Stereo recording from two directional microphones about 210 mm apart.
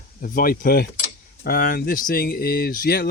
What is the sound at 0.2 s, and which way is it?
Speech, 45° left (ahead or behind).